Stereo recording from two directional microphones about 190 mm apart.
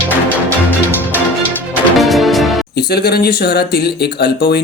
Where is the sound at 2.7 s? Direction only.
60° left (ahead or behind).